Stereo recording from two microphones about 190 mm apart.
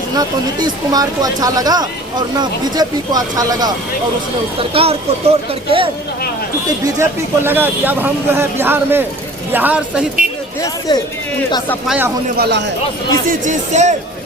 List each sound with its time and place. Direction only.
0.2 s speech: 20° right (ahead or behind)
4.7 s speech: 30° right (ahead or behind)
7.0 s speech: 10° right (ahead or behind)
10.6 s speech: 20° left (ahead or behind)
11.9 s speech: 10° right (ahead or behind)
12.4 s a man's voice: 65° right (ahead or behind)
13.4 s speech: 40° right (ahead or behind)